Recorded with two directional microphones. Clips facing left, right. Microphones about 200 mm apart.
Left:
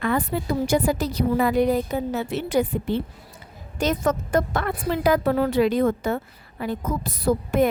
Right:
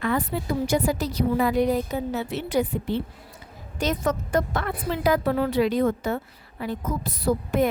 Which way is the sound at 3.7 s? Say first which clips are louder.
Left 2 dB; 50° left (ahead or behind).